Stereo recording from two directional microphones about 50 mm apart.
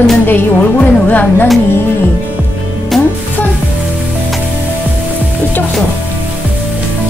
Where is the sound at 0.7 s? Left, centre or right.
Left.